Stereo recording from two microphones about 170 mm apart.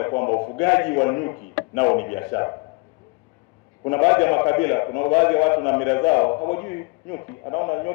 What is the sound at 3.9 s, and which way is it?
A man's voice, 10° left (ahead or behind).